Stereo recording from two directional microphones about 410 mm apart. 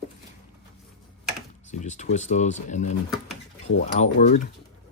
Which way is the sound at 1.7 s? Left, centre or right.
Centre.